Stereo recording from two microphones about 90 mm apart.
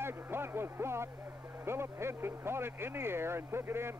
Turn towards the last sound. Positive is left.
turn(degrees=-25)  # may be behind; listen again after turning